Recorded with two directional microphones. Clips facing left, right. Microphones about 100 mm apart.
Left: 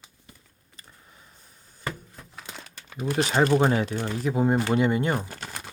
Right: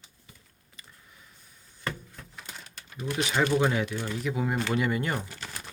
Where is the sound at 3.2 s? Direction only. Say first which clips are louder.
Left 4 dB; 35° left (ahead or behind).